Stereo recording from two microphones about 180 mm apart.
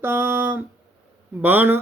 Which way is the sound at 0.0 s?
15° right (ahead or behind).